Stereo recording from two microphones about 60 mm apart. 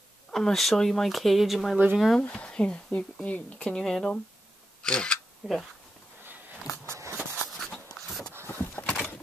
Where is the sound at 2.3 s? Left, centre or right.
Centre.